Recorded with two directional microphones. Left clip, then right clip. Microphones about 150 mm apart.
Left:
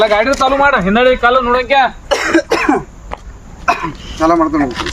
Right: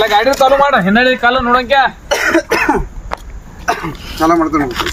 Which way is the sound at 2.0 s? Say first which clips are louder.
Even; 15° left (ahead or behind).